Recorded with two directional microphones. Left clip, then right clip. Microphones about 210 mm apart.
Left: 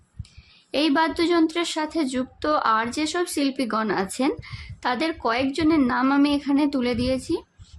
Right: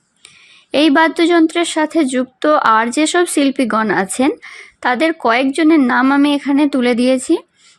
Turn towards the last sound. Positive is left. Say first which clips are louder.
# right 11 dB
turn(degrees=-30)  # may be behind; listen again after turning